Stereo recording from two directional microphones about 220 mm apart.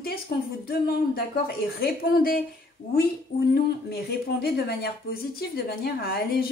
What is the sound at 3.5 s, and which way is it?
A woman's voice, 45° left (ahead or behind).